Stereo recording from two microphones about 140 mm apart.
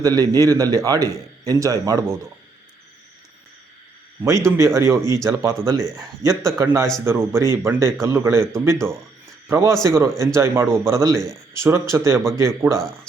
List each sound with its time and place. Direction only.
0.0 s a man's voice: 25° right (ahead or behind)
4.2 s a man's voice: 20° right (ahead or behind)